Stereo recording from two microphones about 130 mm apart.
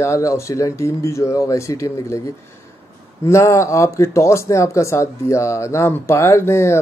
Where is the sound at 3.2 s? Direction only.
20° left (ahead or behind).